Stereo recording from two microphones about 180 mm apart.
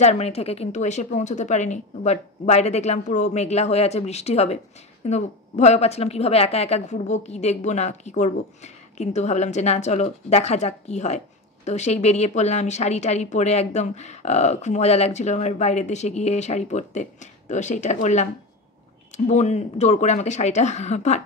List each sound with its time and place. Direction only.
0.0 s a woman's voice: 35° left (ahead or behind)